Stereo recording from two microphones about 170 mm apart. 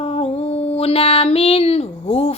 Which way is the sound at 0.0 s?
35° left (ahead or behind).